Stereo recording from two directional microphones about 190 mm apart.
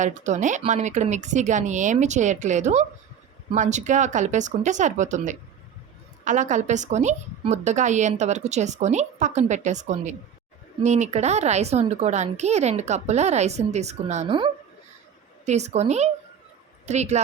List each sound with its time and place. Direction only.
0.0 s a woman's voice: 40° right (ahead or behind)